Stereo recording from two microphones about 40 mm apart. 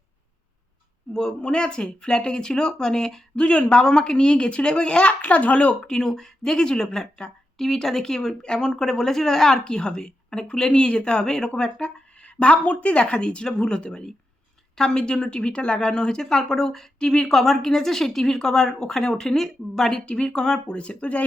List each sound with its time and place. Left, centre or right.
1.4 s speech: left
3.3 s speech: left
5.2 s a child's voice: left
5.8 s a woman's voice: centre
10.7 s speech: left
12.2 s a woman's voice: left
17.3 s a woman's voice: centre
20.1 s speech: left
20.7 s speech: left